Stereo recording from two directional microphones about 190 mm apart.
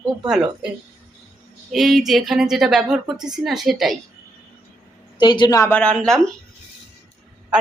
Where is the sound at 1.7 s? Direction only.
Centre (ahead or behind).